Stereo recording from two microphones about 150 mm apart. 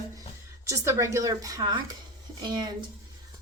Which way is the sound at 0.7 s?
20° right (ahead or behind).